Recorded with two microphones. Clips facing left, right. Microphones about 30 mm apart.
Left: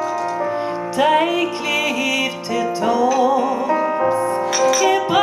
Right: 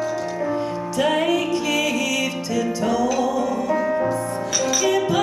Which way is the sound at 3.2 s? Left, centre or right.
Left.